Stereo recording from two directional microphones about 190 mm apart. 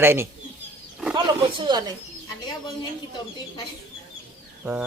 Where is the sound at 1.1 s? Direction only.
20° right (ahead or behind).